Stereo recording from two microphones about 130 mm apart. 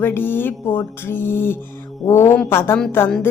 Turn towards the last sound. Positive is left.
turn(degrees=20)  # may be behind; listen again after turning